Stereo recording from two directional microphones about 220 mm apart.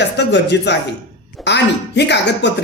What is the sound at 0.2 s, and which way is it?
Speech, 50° left (ahead or behind).